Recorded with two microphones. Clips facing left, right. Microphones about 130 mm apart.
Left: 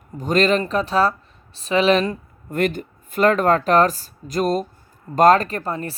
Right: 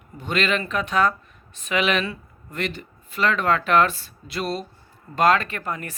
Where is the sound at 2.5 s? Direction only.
50° left (ahead or behind).